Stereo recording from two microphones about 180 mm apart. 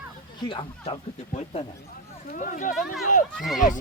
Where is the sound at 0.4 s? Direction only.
25° left (ahead or behind).